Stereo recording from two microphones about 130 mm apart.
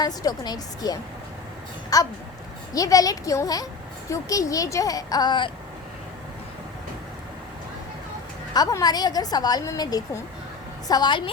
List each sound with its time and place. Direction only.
0.0 s speech: 30° left (ahead or behind)
8.5 s a woman's voice: 30° left (ahead or behind)